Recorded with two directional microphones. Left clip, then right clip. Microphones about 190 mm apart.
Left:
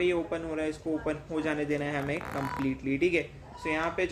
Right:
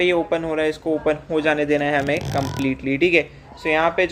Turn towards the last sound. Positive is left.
turn(degrees=-10)  # may be behind; listen again after turning